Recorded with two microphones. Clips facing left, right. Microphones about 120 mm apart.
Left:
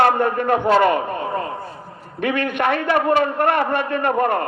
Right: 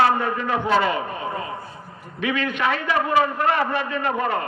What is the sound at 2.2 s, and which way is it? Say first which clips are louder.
A man's voice: left 3 dB; 55° left (ahead or behind).